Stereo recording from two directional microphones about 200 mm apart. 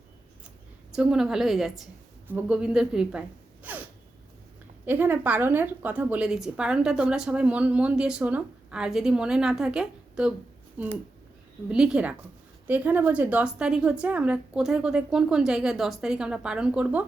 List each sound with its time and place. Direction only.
0.9 s a woman's voice: 5° right (ahead or behind)
4.9 s a woman's voice: 10° right (ahead or behind)